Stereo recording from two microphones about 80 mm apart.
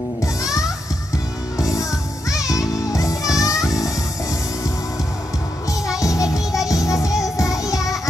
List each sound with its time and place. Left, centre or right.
1.6 s music: left
5.9 s music: left